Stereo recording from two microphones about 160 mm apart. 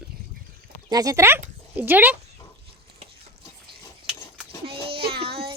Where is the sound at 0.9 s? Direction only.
25° right (ahead or behind).